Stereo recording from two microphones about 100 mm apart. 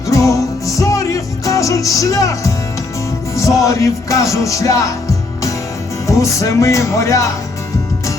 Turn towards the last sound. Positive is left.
turn(degrees=30)  # may be behind; listen again after turning